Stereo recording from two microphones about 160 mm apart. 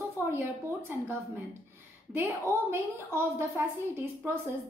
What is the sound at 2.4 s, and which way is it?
A woman's voice, 15° right (ahead or behind).